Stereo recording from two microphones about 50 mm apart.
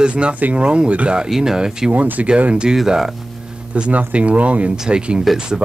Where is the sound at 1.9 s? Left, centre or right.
Right.